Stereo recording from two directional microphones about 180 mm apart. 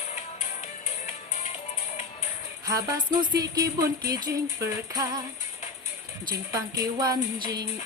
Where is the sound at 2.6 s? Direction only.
20° right (ahead or behind).